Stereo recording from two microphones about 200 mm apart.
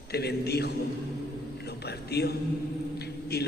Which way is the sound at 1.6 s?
55° left (ahead or behind).